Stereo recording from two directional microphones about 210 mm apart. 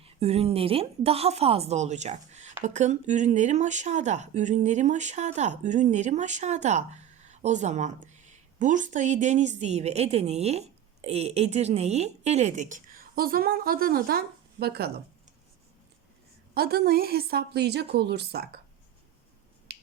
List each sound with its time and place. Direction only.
0.0 s a woman's voice: 30° right (ahead or behind); by 15.0 s 50° right (ahead or behind)
16.6 s a woman's voice: 45° right (ahead or behind)
19.7 s finger snapping: 50° right (ahead or behind)